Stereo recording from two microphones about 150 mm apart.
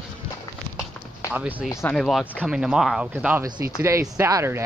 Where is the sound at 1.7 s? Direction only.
20° left (ahead or behind).